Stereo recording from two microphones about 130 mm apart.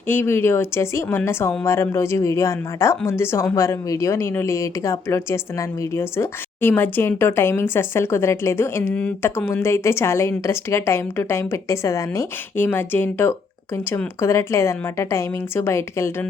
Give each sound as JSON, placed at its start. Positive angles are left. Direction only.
{"t": 0.1, "sound": "speech", "side_deg": 15}
{"t": 9.5, "sound": "speech", "side_deg": 20}